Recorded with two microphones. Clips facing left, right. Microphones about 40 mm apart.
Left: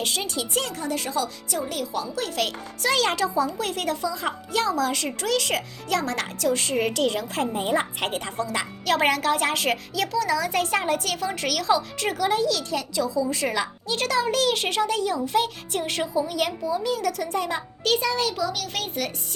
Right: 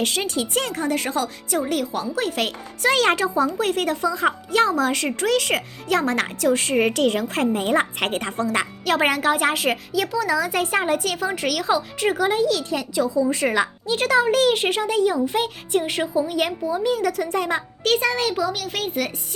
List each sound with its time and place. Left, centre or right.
0.0 s speech: right
7.5 s speech: right
8.9 s a woman's voice: centre
16.3 s speech: right
17.3 s speech: right
18.3 s a woman's voice: centre